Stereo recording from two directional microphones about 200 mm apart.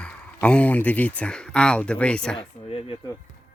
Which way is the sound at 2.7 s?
30° left (ahead or behind).